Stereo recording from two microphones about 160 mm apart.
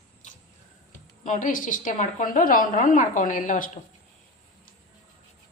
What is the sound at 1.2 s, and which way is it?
A woman's voice, 55° left (ahead or behind).